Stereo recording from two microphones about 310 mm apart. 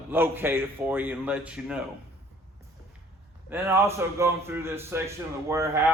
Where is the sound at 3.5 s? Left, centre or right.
Centre.